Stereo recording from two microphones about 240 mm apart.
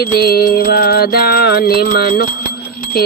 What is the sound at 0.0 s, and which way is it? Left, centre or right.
Music, left.